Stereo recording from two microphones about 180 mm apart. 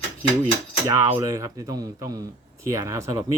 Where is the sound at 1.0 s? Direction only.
15° right (ahead or behind).